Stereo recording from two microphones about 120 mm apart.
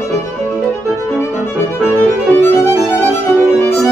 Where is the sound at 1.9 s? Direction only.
20° left (ahead or behind).